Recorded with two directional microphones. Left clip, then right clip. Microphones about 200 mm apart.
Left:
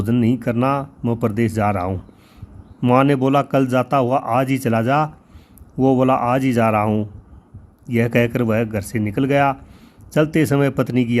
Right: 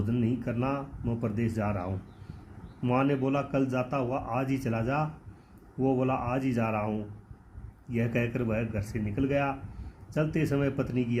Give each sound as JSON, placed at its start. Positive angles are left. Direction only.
{"t": 0.0, "sound": "a man's voice", "side_deg": 50}